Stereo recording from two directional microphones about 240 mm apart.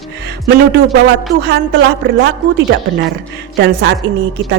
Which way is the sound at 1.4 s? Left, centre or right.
Right.